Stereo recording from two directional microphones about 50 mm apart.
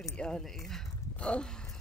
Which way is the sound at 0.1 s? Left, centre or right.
Centre.